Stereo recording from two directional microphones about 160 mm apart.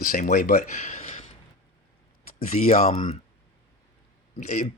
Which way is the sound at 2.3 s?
60° left (ahead or behind).